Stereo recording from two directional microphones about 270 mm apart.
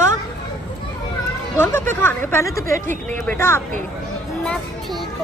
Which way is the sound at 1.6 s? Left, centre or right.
Centre.